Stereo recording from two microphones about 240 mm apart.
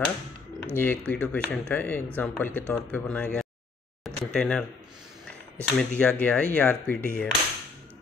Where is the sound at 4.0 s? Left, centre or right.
Centre.